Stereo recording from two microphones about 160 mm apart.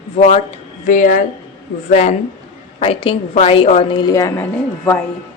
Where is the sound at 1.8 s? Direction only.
45° left (ahead or behind).